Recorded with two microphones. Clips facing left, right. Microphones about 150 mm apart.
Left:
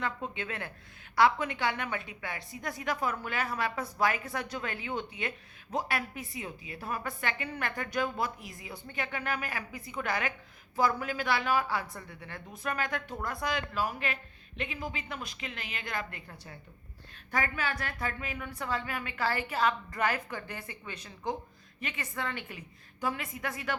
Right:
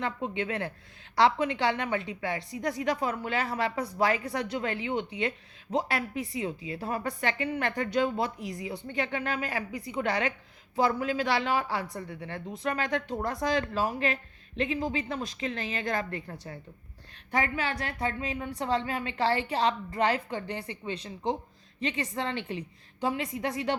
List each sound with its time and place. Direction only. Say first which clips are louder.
0.0 s a woman's voice: right 4 dB; 25° right (ahead or behind)